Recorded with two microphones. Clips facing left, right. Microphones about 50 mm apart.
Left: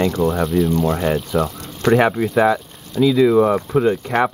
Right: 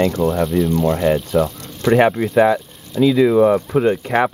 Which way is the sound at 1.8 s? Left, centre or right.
Left.